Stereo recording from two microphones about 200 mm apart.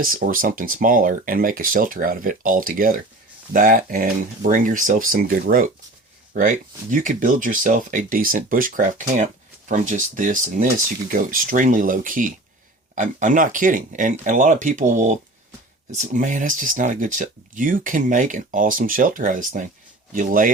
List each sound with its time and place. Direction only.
0.0 s speech: 45° right (ahead or behind)